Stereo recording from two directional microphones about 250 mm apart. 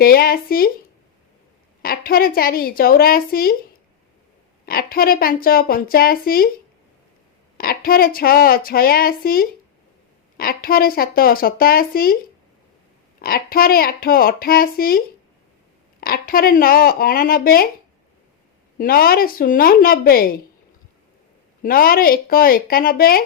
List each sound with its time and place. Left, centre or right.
0.0 s a woman's voice: left
1.8 s a woman's voice: left
4.6 s a woman's voice: left
7.6 s a woman's voice: left
13.2 s a woman's voice: left
18.8 s a woman's voice: left
21.6 s a woman's voice: left